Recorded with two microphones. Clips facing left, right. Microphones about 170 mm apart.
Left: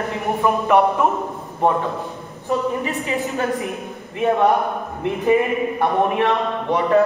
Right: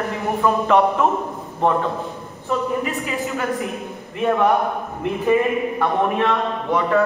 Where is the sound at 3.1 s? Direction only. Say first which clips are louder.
Left 2 dB; 20° left (ahead or behind).